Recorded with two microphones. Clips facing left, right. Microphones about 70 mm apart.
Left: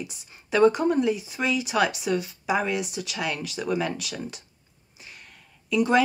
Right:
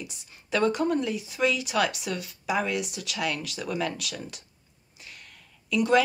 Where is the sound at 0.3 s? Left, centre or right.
Centre.